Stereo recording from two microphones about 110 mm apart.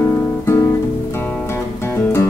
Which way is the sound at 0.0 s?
25° left (ahead or behind).